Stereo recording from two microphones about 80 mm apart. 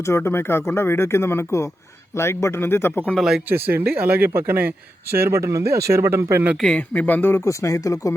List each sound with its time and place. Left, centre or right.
0.0 s speech: left
3.2 s speech: centre
3.5 s speech: right
6.7 s speech: centre
7.6 s speech: left